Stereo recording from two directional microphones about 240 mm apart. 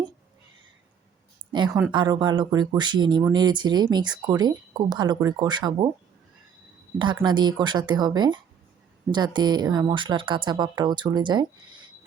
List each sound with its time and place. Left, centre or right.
1.5 s speech: centre
7.0 s speech: centre